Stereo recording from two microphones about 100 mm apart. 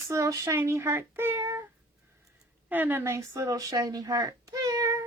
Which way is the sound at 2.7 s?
20° right (ahead or behind).